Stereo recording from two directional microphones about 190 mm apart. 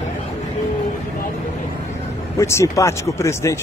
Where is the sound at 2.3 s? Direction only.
15° left (ahead or behind).